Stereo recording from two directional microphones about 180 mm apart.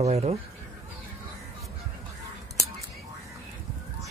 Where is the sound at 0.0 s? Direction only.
35° right (ahead or behind).